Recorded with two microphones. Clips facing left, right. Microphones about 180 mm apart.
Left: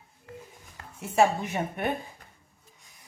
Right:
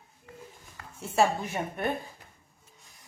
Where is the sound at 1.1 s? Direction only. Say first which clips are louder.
Left 2 dB; 20° left (ahead or behind).